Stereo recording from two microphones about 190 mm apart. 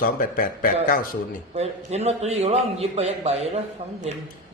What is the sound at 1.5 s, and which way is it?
A man's voice, 35° right (ahead or behind).